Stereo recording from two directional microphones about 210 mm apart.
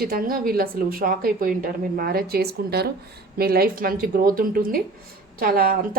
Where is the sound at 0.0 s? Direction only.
45° right (ahead or behind).